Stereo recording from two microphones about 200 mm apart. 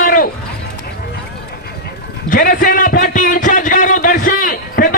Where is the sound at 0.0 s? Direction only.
45° left (ahead or behind).